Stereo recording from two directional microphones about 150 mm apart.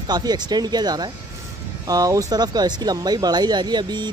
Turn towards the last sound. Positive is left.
turn(degrees=-30)  # may be behind; listen again after turning